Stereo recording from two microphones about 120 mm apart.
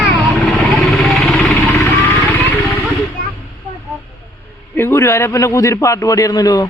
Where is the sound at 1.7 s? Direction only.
15° left (ahead or behind).